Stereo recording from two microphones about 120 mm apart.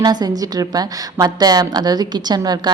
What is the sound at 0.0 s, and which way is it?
A woman's voice, 35° right (ahead or behind).